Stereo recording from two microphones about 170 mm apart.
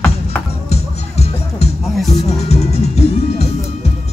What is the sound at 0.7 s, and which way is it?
Music, 40° left (ahead or behind).